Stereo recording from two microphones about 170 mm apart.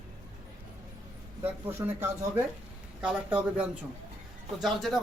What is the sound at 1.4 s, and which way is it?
Speech, 10° right (ahead or behind).